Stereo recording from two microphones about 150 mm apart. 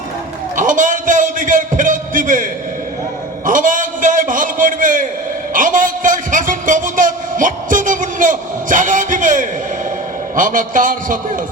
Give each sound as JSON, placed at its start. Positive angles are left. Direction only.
{"t": 0.5, "sound": "a man's voice", "side_deg": -60}